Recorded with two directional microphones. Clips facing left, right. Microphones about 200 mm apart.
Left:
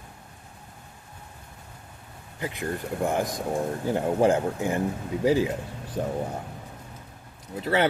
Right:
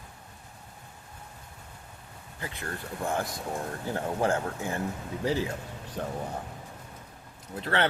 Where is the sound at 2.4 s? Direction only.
15° left (ahead or behind).